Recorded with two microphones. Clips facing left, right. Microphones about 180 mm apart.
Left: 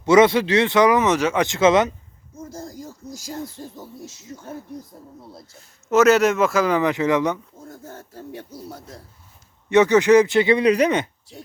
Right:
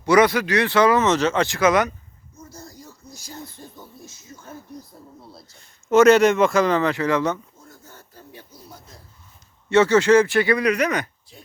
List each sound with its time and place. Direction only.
0.0 s speech: 25° left (ahead or behind)
3.1 s hoot: 90° left
5.5 s speech: 5° left (ahead or behind)
7.7 s speech: 60° left (ahead or behind)
9.6 s speech: 15° left (ahead or behind)